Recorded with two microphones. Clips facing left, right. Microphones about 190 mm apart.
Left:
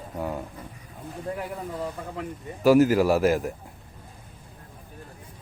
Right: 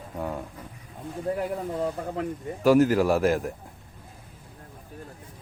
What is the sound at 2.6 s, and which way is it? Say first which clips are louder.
Speech: left 1 dB; 5° left (ahead or behind).